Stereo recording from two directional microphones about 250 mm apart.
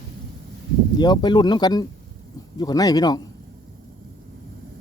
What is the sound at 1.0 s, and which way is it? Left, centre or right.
Speech, centre.